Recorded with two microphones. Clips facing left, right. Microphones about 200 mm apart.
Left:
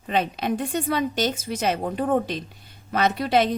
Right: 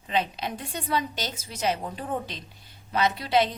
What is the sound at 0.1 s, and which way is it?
A woman's voice, 55° left (ahead or behind).